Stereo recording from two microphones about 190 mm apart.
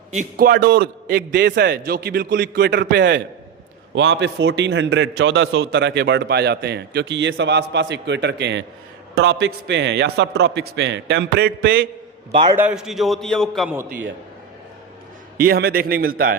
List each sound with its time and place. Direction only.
0.3 s a man's voice: 50° right (ahead or behind)
12.3 s a man's voice: 25° right (ahead or behind)
12.5 s a man's voice: 5° right (ahead or behind)
15.4 s a man's voice: 55° right (ahead or behind)